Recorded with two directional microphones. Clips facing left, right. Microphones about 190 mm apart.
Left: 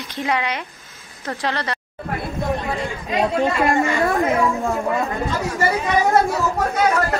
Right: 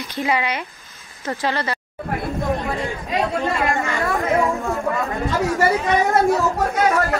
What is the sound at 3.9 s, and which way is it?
Speech, 20° left (ahead or behind).